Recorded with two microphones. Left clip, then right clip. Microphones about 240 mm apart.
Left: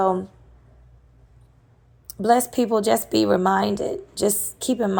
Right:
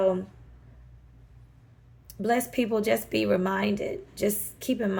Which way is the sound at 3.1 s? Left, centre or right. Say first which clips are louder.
Left 6 dB; centre.